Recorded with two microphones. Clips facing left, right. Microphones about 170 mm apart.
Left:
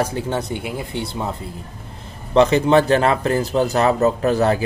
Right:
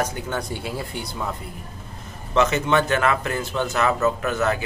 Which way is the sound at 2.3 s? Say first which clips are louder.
Left 6 dB; 35° left (ahead or behind).